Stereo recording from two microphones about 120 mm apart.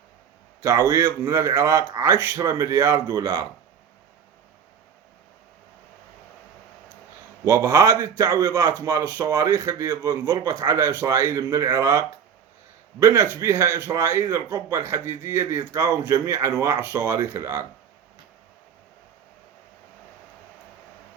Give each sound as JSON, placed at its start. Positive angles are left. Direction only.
{"t": 0.6, "sound": "a man's voice", "side_deg": -25}
{"t": 7.4, "sound": "a man's voice", "side_deg": -25}